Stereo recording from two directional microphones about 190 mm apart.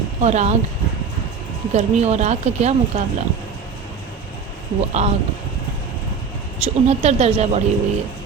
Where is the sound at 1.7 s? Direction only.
35° right (ahead or behind).